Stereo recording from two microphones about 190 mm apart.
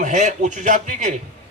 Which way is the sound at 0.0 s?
40° right (ahead or behind).